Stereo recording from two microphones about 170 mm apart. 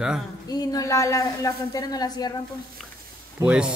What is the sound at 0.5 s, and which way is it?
Speech, 20° left (ahead or behind).